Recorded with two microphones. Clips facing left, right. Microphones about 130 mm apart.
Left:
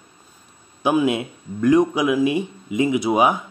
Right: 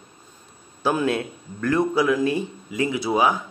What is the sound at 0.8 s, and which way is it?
A man's voice, 15° left (ahead or behind).